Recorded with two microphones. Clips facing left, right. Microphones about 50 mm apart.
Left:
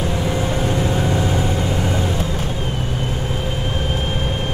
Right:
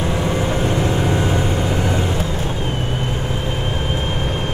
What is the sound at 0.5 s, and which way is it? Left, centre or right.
Vehicle, right.